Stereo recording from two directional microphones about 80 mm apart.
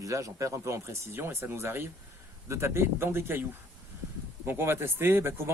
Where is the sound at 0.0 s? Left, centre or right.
Right.